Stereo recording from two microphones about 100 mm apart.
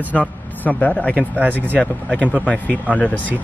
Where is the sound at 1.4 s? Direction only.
20° right (ahead or behind).